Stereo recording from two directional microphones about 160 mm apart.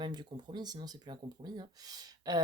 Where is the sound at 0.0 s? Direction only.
25° right (ahead or behind).